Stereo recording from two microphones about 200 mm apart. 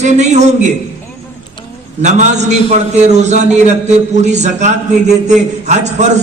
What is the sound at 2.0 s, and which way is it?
A man's voice, 35° right (ahead or behind).